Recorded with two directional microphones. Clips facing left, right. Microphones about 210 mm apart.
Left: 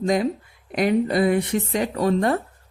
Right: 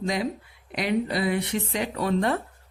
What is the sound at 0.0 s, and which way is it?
Speech, 45° left (ahead or behind).